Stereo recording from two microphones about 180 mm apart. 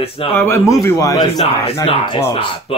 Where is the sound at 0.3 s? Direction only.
10° left (ahead or behind).